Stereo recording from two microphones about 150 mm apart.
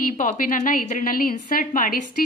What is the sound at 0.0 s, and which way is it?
A woman's voice, 65° left (ahead or behind).